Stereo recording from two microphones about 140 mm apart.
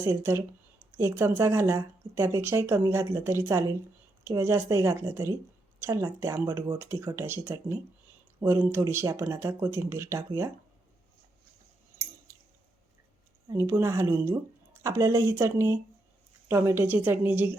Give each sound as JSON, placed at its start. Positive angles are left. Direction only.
{"t": 0.0, "sound": "a woman's voice", "side_deg": -20}
{"t": 13.5, "sound": "a woman's voice", "side_deg": -20}